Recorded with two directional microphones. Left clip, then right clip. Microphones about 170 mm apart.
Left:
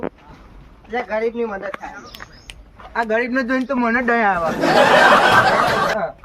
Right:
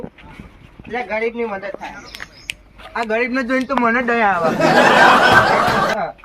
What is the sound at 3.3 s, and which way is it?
Speech, 20° left (ahead or behind).